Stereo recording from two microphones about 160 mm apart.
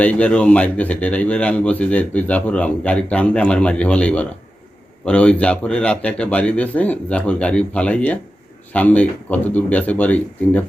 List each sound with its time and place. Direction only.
0.0 s speech: 5° left (ahead or behind)